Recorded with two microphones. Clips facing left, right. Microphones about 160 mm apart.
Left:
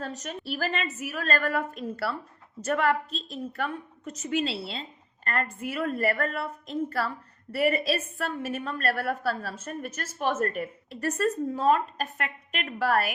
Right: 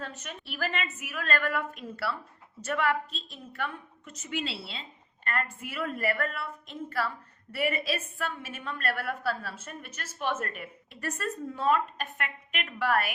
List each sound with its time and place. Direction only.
0.0 s a woman's voice: 40° left (ahead or behind)